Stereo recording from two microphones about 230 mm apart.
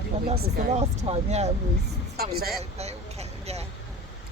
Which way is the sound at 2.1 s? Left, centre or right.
Right.